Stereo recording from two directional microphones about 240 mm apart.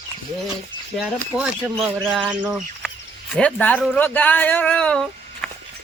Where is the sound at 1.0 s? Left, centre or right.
Centre.